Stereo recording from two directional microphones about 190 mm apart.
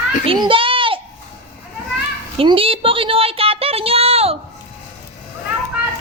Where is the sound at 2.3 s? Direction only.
30° right (ahead or behind).